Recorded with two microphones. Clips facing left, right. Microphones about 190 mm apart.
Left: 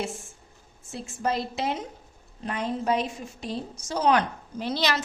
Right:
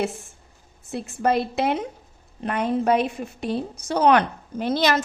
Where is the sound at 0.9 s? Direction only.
60° right (ahead or behind).